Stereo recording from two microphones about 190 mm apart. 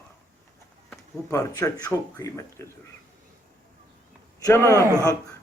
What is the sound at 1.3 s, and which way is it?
Speech, 15° left (ahead or behind).